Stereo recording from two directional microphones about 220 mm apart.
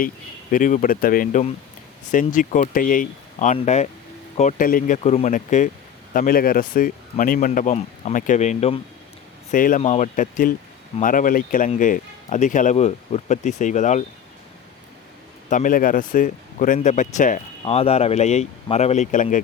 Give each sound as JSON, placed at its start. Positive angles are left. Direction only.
{"t": 0.5, "sound": "a man's voice", "side_deg": 40}
{"t": 15.4, "sound": "a man's voice", "side_deg": 35}